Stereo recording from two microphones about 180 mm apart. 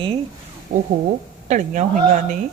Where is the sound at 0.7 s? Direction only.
50° right (ahead or behind).